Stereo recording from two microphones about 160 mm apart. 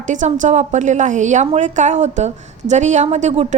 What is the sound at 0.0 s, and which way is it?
A woman's voice, 50° right (ahead or behind).